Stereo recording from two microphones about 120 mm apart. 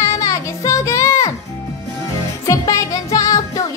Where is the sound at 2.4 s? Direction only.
30° left (ahead or behind).